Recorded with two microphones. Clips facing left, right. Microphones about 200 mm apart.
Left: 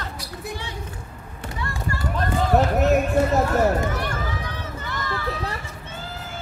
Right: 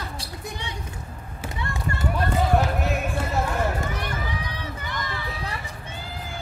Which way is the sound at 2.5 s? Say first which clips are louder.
Left 6 dB; 45° left (ahead or behind).